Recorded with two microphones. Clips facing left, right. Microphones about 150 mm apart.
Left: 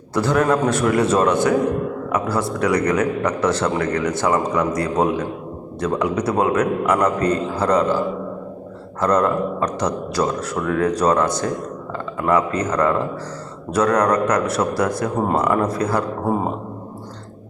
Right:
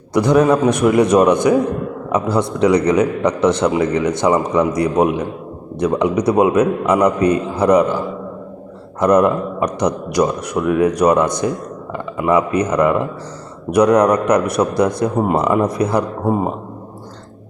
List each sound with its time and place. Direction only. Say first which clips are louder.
0.1 s speech: right 5 dB; 15° right (ahead or behind)